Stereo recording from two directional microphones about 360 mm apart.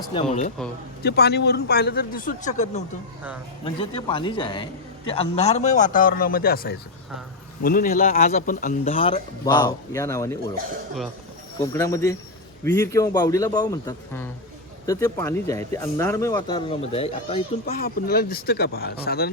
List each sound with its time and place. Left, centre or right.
0.1 s speech: centre
11.6 s speech: centre; by 19.3 s left